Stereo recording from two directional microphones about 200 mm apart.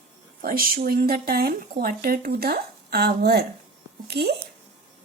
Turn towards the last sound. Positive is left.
turn(degrees=-55)  # may be behind; listen again after turning